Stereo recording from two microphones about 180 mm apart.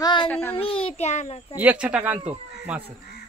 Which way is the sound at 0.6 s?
30° left (ahead or behind).